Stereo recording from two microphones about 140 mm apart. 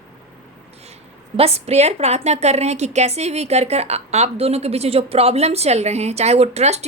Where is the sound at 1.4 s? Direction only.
45° right (ahead or behind).